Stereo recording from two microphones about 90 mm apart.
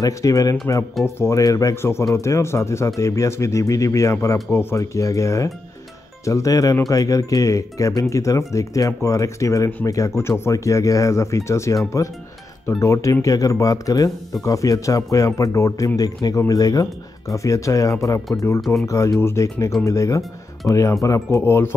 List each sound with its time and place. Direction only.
0.0 s speech: 40° left (ahead or behind)
1.8 s speech: 30° left (ahead or behind)
16.0 s speech: 45° left (ahead or behind); by 21.6 s 30° left (ahead or behind)